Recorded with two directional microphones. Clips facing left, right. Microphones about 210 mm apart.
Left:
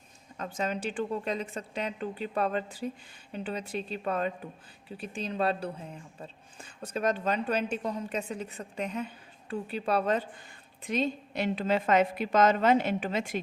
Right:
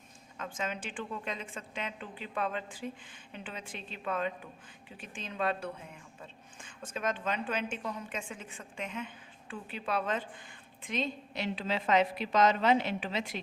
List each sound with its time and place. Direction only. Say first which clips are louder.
0.3 s a woman's voice: left 5 dB; 40° left (ahead or behind)